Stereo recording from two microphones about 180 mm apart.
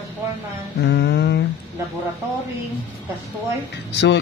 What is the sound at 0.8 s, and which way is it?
Music, 65° left (ahead or behind).